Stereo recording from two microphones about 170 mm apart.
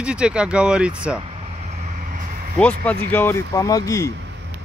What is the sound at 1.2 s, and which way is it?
Vehicle, 40° right (ahead or behind).